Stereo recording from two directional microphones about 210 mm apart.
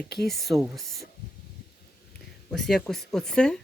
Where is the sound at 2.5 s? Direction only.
Centre (ahead or behind).